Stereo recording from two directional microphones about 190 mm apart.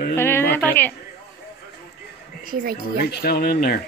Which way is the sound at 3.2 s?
55° left (ahead or behind).